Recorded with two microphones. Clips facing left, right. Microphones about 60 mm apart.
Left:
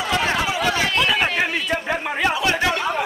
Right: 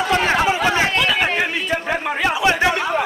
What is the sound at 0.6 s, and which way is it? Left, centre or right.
Chatter, right.